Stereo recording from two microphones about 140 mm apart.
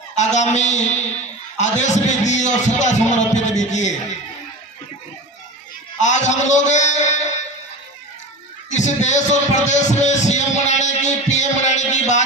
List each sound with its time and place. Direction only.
0.2 s speech: 55° left (ahead or behind)
6.0 s speech: 60° left (ahead or behind)
8.7 s speech: 55° left (ahead or behind)